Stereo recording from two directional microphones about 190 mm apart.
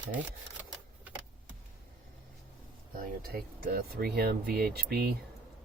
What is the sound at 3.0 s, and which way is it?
Speech, 55° right (ahead or behind).